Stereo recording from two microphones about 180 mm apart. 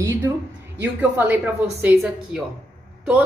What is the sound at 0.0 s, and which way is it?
A woman's voice, 15° right (ahead or behind).